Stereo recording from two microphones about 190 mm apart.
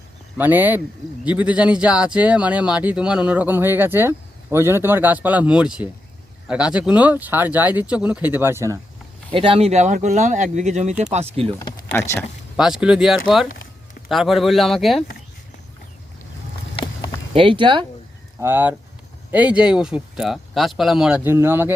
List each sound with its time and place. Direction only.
0.3 s speech: 10° right (ahead or behind)
9.3 s speech: 30° right (ahead or behind)
11.9 s speech: 15° left (ahead or behind)
12.5 s speech: 5° right (ahead or behind)
17.3 s speech: 25° right (ahead or behind)
18.3 s speech: 10° right (ahead or behind)